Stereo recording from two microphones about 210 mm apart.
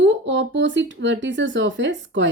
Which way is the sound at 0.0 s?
60° right (ahead or behind).